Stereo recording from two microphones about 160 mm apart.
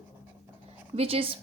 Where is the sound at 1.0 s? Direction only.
35° right (ahead or behind).